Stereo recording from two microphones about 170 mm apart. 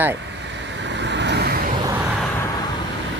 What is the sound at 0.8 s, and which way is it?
Vehicle, 90° right.